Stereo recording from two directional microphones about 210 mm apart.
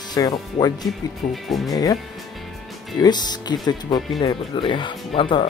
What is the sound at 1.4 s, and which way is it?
Speech, centre (ahead or behind).